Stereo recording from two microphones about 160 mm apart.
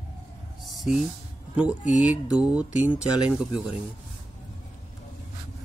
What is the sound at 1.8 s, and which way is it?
Speech, 50° left (ahead or behind).